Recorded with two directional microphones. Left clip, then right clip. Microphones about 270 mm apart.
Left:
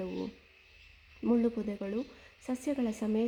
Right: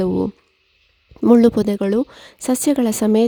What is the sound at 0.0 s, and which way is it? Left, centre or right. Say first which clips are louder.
Speech: right 18 dB; right.